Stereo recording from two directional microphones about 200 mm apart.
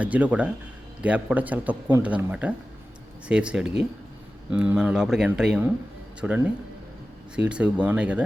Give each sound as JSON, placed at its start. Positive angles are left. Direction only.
{"t": 0.0, "sound": "speech", "side_deg": -5}